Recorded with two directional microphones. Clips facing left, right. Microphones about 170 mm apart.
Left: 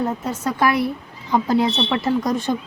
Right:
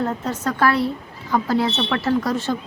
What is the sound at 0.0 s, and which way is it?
A woman's voice, 10° left (ahead or behind).